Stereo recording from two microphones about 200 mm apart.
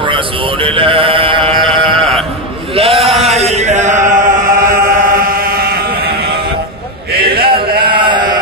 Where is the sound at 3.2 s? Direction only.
35° right (ahead or behind); by 6.4 s 50° right (ahead or behind).